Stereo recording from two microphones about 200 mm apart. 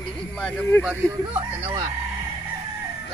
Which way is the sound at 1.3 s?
25° right (ahead or behind).